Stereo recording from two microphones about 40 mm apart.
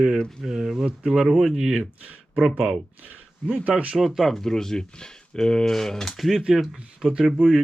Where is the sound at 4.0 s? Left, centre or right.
Centre.